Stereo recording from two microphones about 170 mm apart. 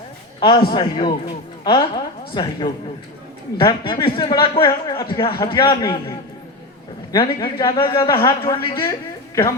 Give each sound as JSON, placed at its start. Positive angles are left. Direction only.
{"t": 0.3, "sound": "a man's voice", "side_deg": 30}